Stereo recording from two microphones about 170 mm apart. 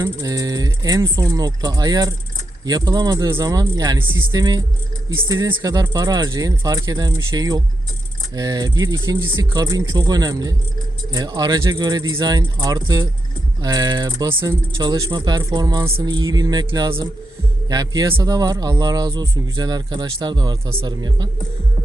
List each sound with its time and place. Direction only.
0.0 s speech: 20° right (ahead or behind)